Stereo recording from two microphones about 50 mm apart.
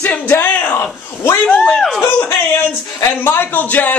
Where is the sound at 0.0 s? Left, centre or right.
Left.